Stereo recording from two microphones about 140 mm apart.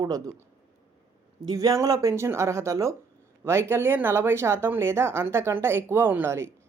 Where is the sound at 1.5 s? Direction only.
25° right (ahead or behind).